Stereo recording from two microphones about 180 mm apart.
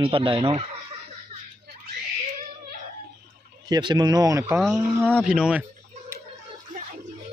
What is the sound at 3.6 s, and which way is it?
Speech, 25° right (ahead or behind).